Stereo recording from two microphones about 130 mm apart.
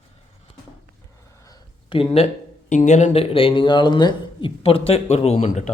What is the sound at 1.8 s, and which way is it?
Speech, 45° left (ahead or behind).